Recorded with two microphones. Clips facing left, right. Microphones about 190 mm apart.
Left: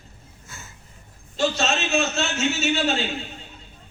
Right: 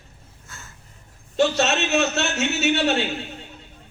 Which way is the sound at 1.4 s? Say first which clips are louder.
Right 3 dB; 65° right (ahead or behind).